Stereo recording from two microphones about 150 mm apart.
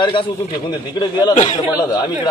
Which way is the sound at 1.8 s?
30° left (ahead or behind).